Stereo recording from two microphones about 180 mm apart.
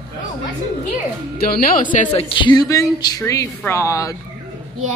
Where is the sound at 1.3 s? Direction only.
50° left (ahead or behind); by 4.1 s 15° left (ahead or behind).